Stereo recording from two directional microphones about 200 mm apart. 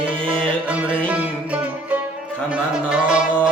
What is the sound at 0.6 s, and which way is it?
Music, 5° right (ahead or behind).